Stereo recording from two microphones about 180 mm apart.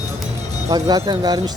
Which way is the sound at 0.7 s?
20° right (ahead or behind).